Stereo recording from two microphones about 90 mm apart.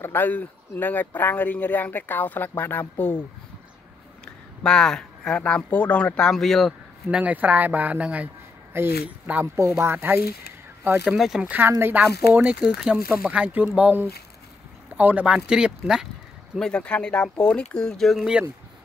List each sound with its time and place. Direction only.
0.0 s speech: 20° left (ahead or behind)
4.2 s speech: 10° left (ahead or behind)
7.1 s speech: 15° right (ahead or behind)
11.1 s speech: 5° right (ahead or behind)
11.4 s speech: 20° right (ahead or behind)
12.4 s speech: 10° right (ahead or behind)
16.5 s speech: 10° left (ahead or behind)